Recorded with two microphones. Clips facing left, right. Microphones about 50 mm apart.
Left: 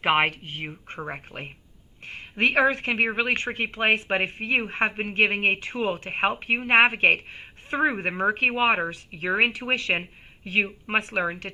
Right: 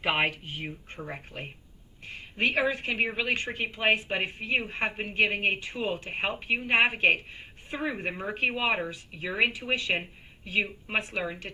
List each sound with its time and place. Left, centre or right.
0.0 s a woman's voice: left
2.3 s a woman's voice: left